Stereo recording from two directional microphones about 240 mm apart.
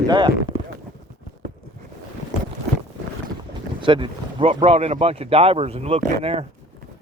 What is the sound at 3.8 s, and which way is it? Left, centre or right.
Speech, right.